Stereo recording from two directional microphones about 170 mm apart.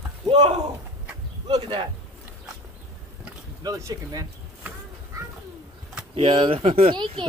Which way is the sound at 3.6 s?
20° right (ahead or behind).